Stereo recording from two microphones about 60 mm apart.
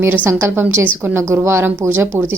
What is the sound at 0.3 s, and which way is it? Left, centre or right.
A woman's voice, right.